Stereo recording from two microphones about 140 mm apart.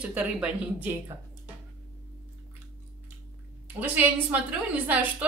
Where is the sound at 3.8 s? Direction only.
10° right (ahead or behind).